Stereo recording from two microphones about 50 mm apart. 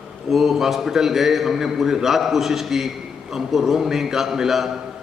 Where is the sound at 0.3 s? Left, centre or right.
Centre.